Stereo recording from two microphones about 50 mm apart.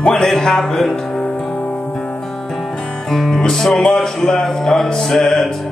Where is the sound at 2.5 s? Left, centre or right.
Centre.